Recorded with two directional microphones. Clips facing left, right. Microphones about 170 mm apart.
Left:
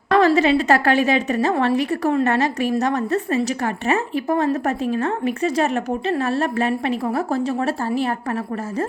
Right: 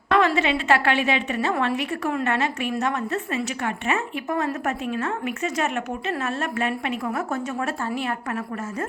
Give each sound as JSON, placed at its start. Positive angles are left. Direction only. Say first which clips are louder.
{"t": 0.1, "sound": "a woman's voice", "louder": "left 5 dB", "side_deg": 40}